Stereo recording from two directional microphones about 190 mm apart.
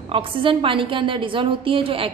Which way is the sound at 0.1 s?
25° right (ahead or behind).